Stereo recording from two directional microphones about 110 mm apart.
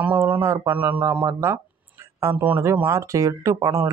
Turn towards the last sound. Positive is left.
turn(degrees=-25)  # may be behind; listen again after turning